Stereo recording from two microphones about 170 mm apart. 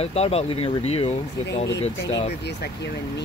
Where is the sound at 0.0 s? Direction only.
35° left (ahead or behind).